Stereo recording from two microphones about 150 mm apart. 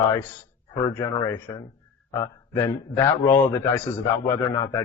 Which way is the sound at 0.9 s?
15° left (ahead or behind).